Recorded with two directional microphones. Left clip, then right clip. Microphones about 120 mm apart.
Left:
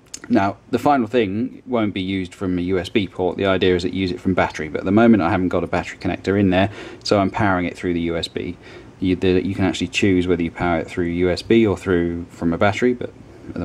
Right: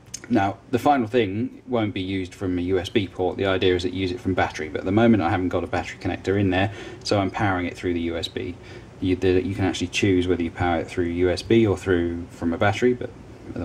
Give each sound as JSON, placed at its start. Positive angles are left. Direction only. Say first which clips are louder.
{"t": 0.3, "sound": "speech", "louder": "left 3 dB", "side_deg": 30}